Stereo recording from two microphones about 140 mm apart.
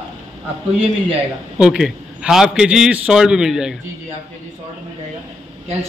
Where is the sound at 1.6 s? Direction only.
5° right (ahead or behind).